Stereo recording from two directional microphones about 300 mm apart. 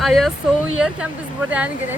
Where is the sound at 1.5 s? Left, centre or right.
Centre.